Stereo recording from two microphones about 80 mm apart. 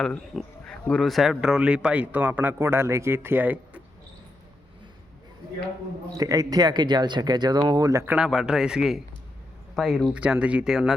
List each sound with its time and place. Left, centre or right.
0.0 s speech: centre; by 3.8 s right
6.1 s speech: right
8.2 s speech: centre
10.2 s speech: centre